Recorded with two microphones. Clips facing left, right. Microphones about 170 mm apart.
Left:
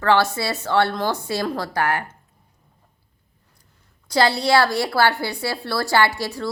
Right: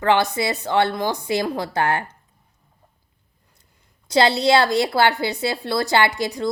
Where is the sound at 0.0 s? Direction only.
20° right (ahead or behind).